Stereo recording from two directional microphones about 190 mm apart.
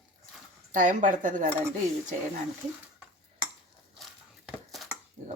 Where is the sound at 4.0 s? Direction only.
Centre (ahead or behind).